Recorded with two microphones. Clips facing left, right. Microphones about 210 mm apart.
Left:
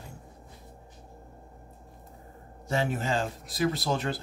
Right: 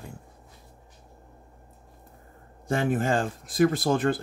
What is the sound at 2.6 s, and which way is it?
Speech, 50° right (ahead or behind).